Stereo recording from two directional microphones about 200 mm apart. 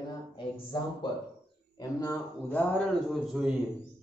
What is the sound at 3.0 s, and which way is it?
Speech, centre (ahead or behind).